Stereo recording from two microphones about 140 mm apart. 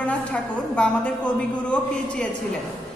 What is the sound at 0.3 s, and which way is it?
A woman's voice, 5° left (ahead or behind).